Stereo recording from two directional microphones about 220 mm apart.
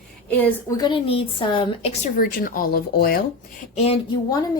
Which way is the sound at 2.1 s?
40° left (ahead or behind).